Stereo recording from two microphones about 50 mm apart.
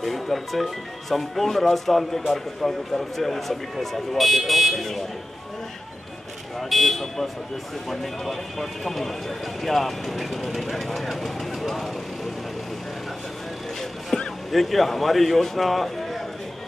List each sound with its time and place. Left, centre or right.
0.0 s speech: centre
6.7 s speech: centre
14.1 s music: centre
14.5 s speech: centre